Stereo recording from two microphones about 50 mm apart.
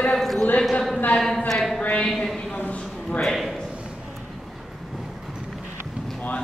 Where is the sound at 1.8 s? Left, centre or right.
Left.